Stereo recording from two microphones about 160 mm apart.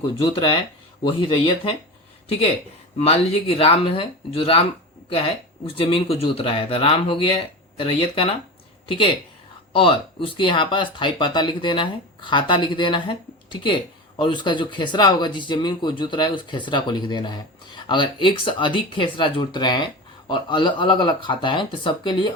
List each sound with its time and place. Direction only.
0.2 s speech: 30° left (ahead or behind)
3.0 s speech: 35° left (ahead or behind)
9.7 s speech: 35° left (ahead or behind)